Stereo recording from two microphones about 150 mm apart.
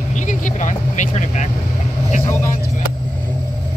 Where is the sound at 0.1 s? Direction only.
55° left (ahead or behind).